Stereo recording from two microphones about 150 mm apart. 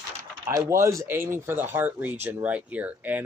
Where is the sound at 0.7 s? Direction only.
20° right (ahead or behind).